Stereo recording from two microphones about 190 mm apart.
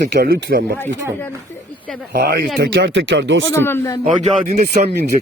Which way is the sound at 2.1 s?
60° right (ahead or behind).